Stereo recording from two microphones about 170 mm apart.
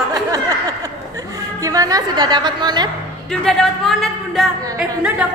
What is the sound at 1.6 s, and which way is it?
A woman's voice, 20° right (ahead or behind).